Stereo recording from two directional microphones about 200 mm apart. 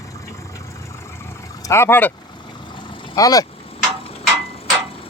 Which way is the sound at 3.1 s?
15° left (ahead or behind).